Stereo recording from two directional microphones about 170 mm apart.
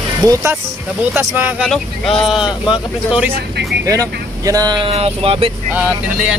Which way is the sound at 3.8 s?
20° right (ahead or behind).